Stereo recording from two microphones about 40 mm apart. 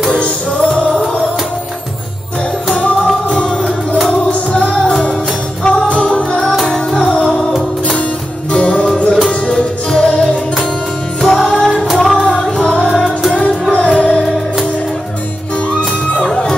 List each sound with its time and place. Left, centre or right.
0.1 s music: left
3.3 s music: left
6.6 s music: centre
7.0 s music: left
8.5 s music: left
9.8 s music: centre
11.5 s music: centre
16.3 s music: centre